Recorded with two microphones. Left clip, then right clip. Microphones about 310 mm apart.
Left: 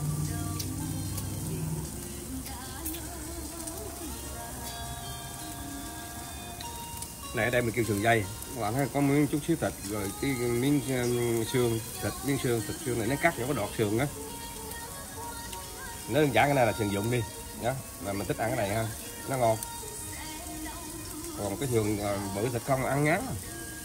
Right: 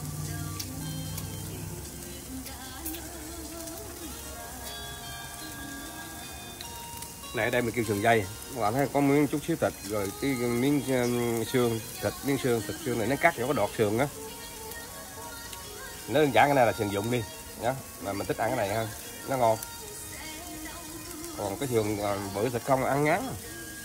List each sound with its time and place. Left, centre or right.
7.3 s speech: centre
16.1 s speech: centre
21.5 s speech: centre